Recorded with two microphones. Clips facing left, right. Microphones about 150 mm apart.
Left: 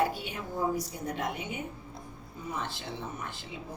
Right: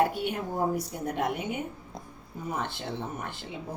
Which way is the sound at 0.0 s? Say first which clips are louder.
Right 4 dB; 55° right (ahead or behind).